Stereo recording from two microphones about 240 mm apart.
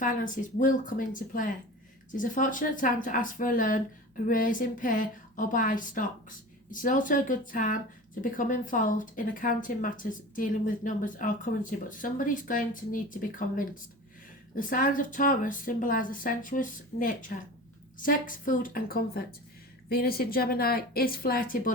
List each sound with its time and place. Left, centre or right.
0.0 s speech: left